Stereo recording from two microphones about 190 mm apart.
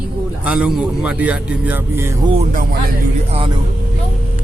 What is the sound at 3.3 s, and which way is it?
Speech, 30° right (ahead or behind).